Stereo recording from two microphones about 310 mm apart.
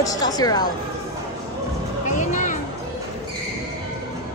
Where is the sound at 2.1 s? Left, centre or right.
Left.